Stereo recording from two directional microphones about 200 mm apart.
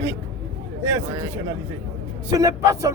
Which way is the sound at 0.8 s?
15° right (ahead or behind).